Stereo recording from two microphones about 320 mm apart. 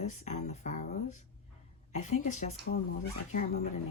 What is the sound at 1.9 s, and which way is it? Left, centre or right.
Speech, left.